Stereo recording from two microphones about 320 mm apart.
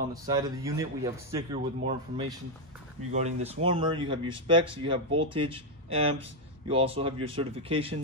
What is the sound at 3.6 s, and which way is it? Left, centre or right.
Speech, centre.